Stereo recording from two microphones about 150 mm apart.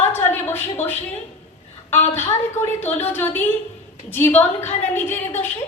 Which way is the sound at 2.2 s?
50° left (ahead or behind).